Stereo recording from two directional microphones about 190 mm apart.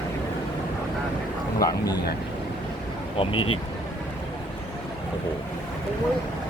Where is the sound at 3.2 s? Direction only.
30° left (ahead or behind).